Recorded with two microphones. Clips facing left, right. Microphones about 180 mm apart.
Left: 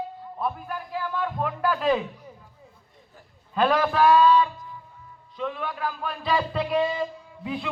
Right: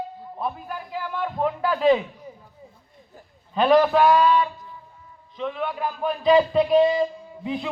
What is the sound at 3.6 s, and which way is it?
Speech, 15° right (ahead or behind).